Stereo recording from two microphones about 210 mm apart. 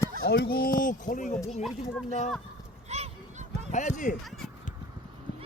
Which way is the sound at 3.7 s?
35° left (ahead or behind).